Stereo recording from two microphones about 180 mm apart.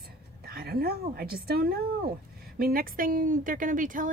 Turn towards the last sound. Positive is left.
turn(degrees=-45)  # may be behind; listen again after turning